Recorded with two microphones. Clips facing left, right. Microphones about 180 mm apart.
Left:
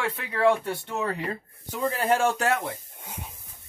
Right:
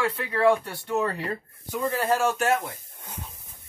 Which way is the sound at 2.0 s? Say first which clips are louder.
Left 1 dB; 25° left (ahead or behind).